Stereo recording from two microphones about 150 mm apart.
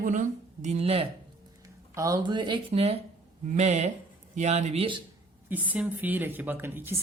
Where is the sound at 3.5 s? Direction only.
50° right (ahead or behind).